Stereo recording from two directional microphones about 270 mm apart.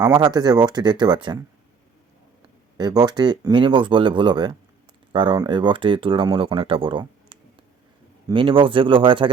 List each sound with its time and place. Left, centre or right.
0.0 s speech: centre
2.7 s speech: centre